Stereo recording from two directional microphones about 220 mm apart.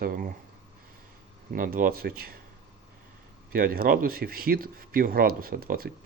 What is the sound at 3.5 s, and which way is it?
Speech, 40° right (ahead or behind).